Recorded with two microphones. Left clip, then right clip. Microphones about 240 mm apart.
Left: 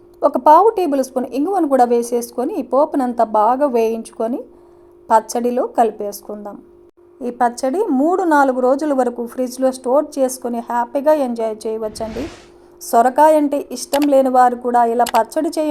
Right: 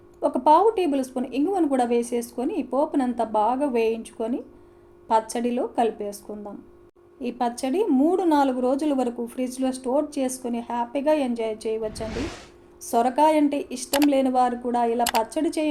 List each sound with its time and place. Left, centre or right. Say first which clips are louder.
0.2 s a woman's voice: left 8 dB; left
12.0 s speech: left 5 dB; centre
12.9 s a woman's voice: left 8 dB; left